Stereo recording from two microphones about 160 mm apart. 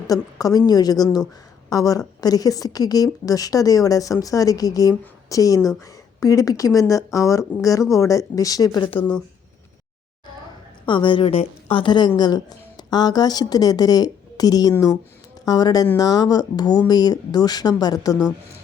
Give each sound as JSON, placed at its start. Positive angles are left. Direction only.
{"t": 0.1, "sound": "a woman's voice", "side_deg": 20}
{"t": 10.8, "sound": "a woman's voice", "side_deg": 30}